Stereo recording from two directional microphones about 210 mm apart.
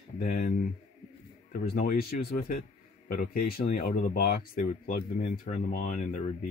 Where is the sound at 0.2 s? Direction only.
40° left (ahead or behind).